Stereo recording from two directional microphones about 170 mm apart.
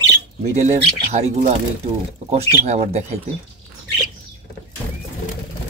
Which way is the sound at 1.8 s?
55° right (ahead or behind).